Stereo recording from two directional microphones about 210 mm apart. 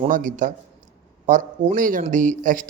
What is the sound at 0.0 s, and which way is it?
A man's voice, 40° right (ahead or behind).